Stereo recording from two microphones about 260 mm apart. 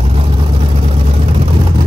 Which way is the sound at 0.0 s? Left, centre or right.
Right.